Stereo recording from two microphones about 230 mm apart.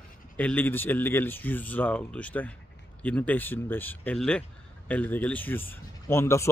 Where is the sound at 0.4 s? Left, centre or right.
Centre.